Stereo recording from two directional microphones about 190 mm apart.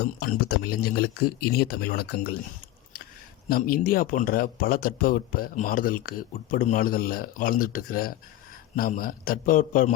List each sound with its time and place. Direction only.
0.0 s speech: 55° left (ahead or behind)
3.5 s speech: 50° left (ahead or behind)